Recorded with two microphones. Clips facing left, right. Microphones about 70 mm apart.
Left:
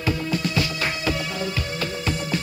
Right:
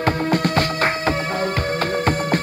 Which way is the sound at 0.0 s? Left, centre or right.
Right.